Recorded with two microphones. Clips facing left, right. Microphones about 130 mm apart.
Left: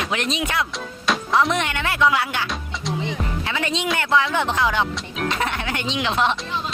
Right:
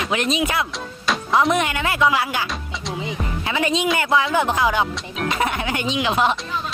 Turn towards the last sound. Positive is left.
turn(degrees=-5)  # may be behind; listen again after turning